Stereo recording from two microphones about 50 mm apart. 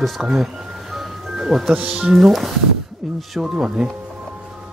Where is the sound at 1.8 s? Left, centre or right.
Right.